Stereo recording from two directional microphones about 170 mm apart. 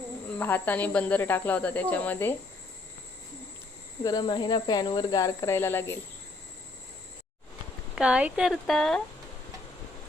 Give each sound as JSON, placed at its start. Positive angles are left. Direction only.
{"t": 0.3, "sound": "speech", "side_deg": 10}
{"t": 4.0, "sound": "speech", "side_deg": 25}
{"t": 7.9, "sound": "speech", "side_deg": -5}